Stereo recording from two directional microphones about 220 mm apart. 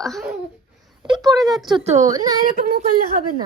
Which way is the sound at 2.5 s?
40° right (ahead or behind).